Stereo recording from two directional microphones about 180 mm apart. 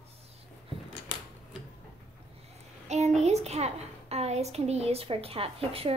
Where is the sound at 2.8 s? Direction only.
40° right (ahead or behind).